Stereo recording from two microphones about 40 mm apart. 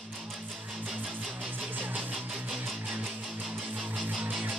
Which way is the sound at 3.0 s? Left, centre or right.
Centre.